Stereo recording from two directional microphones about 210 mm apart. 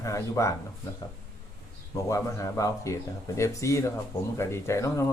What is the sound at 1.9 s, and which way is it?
Speech, 15° left (ahead or behind).